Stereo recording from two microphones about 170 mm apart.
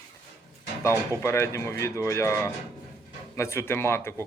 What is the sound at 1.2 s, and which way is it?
Speech, 15° left (ahead or behind).